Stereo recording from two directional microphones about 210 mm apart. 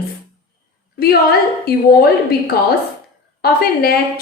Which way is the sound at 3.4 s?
45° left (ahead or behind).